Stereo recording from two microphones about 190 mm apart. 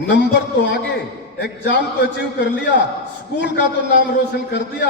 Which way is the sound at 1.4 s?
65° left (ahead or behind).